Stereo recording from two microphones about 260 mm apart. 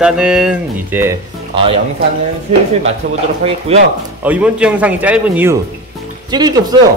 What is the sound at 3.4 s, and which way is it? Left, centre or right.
Speech, right.